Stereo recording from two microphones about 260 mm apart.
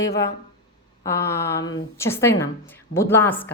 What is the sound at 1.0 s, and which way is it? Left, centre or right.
Speech, centre.